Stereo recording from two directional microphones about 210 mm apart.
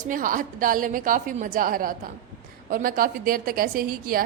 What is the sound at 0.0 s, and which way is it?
A woman's voice, 40° right (ahead or behind).